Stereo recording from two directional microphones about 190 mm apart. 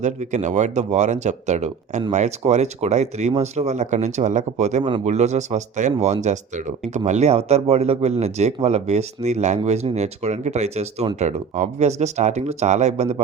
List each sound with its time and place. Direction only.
0.0 s speech: 40° right (ahead or behind)